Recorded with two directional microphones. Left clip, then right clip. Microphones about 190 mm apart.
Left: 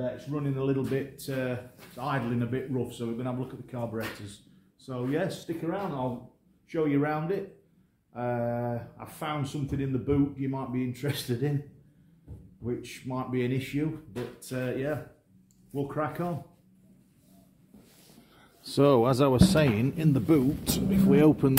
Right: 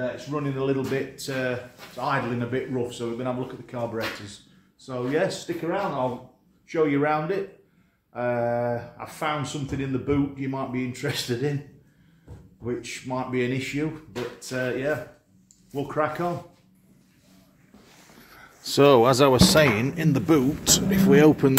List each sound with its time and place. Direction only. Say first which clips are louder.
0.3 s speech: right 4 dB; 10° left (ahead or behind)
12.6 s speech: right 5 dB; 15° left (ahead or behind)
18.3 s a man's voice: right 7 dB; centre (ahead or behind)